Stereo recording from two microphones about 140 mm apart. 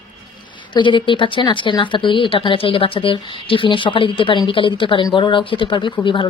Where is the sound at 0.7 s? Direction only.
35° left (ahead or behind).